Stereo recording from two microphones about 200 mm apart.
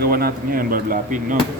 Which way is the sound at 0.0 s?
50° right (ahead or behind).